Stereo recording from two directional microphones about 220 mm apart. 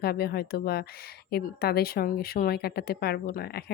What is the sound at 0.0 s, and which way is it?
Speech, 45° left (ahead or behind).